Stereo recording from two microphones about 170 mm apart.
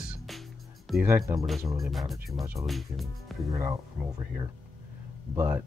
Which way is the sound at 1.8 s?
Centre (ahead or behind).